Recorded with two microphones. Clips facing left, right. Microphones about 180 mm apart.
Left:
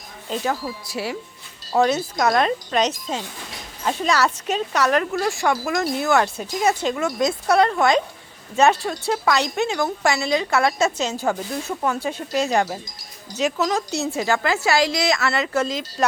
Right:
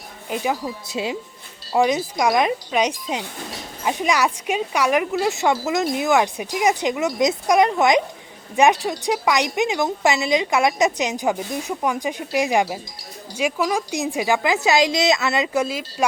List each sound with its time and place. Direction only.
0.3 s a woman's voice: 15° right (ahead or behind)